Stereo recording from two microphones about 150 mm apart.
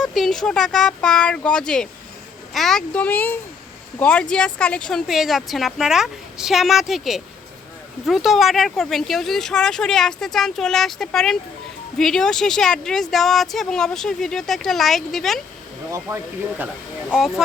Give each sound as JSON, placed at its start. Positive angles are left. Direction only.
{"t": 0.0, "sound": "speech", "side_deg": 0}
{"t": 15.9, "sound": "speech", "side_deg": -15}
{"t": 17.2, "sound": "speech", "side_deg": 0}